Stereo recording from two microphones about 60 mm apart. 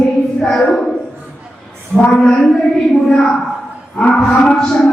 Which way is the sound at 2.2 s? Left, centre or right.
Centre.